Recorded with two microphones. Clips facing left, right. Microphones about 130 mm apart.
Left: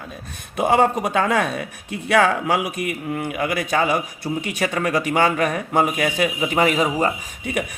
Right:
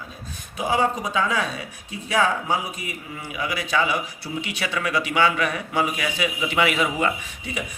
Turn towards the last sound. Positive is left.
turn(degrees=40)  # may be behind; listen again after turning